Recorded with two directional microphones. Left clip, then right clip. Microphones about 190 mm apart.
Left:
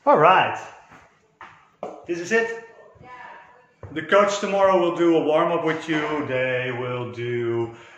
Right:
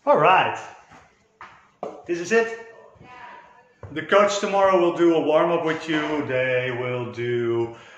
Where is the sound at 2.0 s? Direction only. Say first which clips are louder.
Right 1 dB; 5° left (ahead or behind).